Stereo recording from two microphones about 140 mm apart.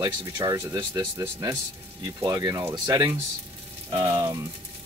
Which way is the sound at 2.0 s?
25° right (ahead or behind).